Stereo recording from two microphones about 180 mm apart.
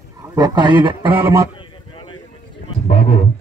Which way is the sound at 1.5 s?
25° left (ahead or behind).